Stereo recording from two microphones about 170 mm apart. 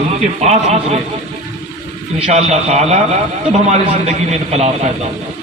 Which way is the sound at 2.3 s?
40° right (ahead or behind).